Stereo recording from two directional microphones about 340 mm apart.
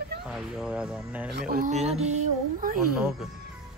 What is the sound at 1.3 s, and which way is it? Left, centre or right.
Speech, right.